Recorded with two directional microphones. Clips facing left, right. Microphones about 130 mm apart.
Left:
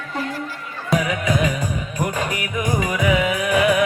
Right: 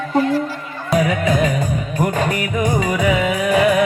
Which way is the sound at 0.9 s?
40° right (ahead or behind).